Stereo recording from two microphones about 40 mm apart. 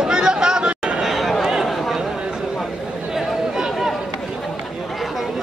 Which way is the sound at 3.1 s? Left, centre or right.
Centre.